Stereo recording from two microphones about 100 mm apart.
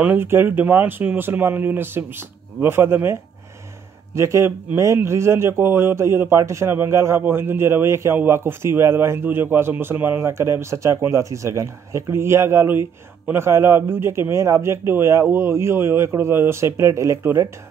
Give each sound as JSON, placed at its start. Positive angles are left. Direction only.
{"t": 0.0, "sound": "a man's voice", "side_deg": -20}